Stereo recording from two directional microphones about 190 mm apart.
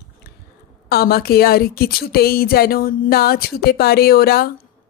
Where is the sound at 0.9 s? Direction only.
55° left (ahead or behind).